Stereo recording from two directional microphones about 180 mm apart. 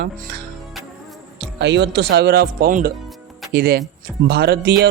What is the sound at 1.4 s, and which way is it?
A man's voice, 75° right (ahead or behind).